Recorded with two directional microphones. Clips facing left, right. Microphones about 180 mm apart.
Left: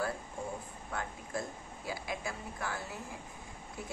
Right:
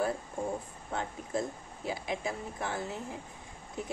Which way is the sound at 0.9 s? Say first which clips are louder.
Right 4 dB; 25° right (ahead or behind).